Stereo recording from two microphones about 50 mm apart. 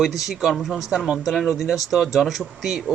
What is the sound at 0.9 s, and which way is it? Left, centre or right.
Speech, centre.